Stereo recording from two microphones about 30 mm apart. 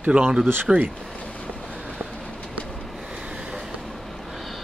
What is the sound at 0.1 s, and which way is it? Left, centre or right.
Speech, right.